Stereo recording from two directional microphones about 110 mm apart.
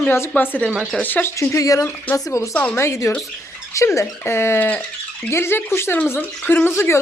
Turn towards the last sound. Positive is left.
turn(degrees=25)  # may be behind; listen again after turning